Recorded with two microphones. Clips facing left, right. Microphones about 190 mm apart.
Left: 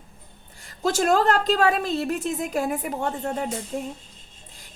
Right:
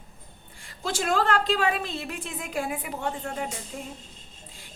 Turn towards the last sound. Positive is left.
turn(degrees=45)  # may be behind; listen again after turning